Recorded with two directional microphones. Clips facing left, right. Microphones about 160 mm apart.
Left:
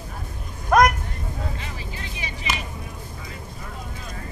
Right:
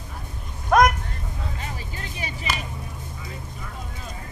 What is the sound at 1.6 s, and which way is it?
Vehicle, 45° right (ahead or behind).